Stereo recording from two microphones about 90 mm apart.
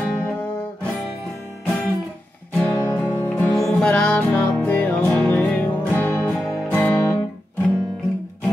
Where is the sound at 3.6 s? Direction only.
5° left (ahead or behind).